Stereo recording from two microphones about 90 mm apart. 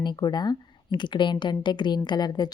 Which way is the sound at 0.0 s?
55° left (ahead or behind).